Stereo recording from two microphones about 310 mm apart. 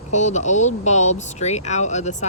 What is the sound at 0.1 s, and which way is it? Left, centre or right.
Speech, left.